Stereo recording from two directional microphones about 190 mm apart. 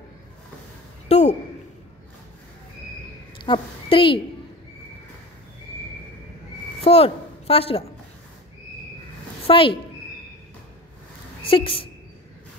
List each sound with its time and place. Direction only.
1.0 s a sound: 35° left (ahead or behind)
3.4 s a woman's voice: 25° left (ahead or behind)
6.8 s a woman's voice: 30° left (ahead or behind)
9.5 s speech: 30° left (ahead or behind)
11.4 s speech: 30° left (ahead or behind)